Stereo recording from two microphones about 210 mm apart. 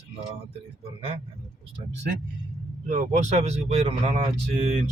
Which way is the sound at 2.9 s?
35° right (ahead or behind).